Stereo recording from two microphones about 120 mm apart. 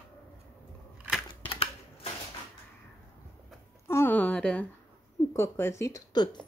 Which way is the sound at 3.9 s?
20° left (ahead or behind).